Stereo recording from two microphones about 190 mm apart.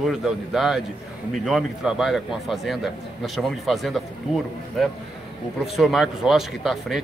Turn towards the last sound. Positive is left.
turn(degrees=0)  # may be behind; listen again after turning